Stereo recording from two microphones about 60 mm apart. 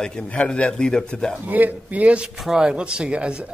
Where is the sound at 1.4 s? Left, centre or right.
Right.